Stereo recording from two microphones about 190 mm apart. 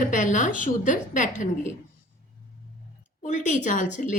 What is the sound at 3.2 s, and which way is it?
Speech, 40° left (ahead or behind).